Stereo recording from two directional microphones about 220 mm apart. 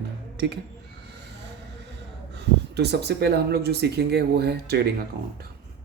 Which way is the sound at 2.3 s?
50° right (ahead or behind).